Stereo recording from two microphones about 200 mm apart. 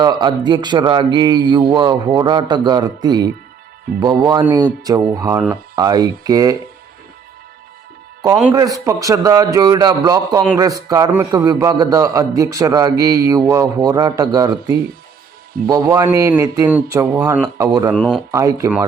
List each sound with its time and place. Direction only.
0.0 s a man's voice: 20° right (ahead or behind)
8.5 s a man's voice: 15° right (ahead or behind)
17.6 s a man's voice: 20° right (ahead or behind)
17.9 s speech: centre (ahead or behind)
18.3 s a man's voice: 15° right (ahead or behind)